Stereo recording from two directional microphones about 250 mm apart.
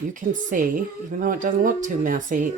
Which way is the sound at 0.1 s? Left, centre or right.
Right.